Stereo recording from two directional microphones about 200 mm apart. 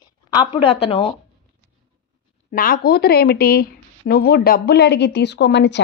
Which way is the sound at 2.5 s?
45° left (ahead or behind).